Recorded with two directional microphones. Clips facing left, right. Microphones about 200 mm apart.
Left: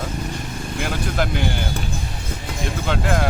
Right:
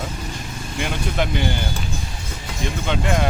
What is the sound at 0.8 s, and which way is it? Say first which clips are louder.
Speech: even; centre (ahead or behind).